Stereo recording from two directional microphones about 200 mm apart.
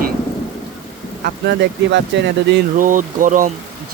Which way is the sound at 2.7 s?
40° right (ahead or behind).